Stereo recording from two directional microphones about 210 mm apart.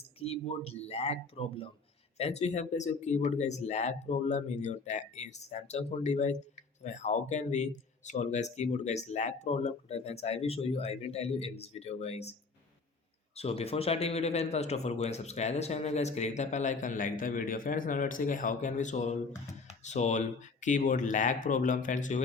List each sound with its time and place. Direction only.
0.2 s speech: 30° left (ahead or behind)